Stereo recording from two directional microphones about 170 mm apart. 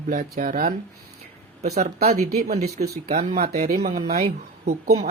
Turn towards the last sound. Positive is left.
turn(degrees=-40)  # may be behind; listen again after turning